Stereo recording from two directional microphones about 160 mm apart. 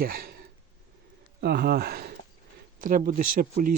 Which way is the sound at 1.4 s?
90° right.